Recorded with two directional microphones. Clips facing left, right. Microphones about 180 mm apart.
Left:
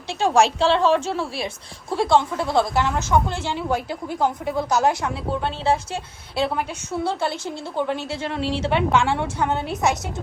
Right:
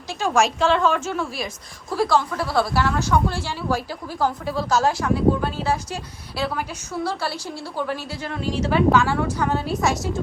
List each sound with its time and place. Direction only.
0.1 s a woman's voice: 30° left (ahead or behind)